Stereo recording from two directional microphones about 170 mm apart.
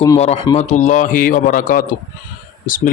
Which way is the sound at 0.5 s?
40° left (ahead or behind).